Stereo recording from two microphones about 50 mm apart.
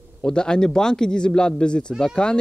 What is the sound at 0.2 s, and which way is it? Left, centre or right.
Speech, centre.